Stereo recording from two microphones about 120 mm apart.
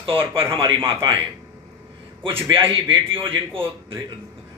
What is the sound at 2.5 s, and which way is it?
Speech, 45° right (ahead or behind).